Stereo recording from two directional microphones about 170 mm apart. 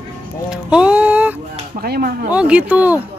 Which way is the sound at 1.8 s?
60° right (ahead or behind).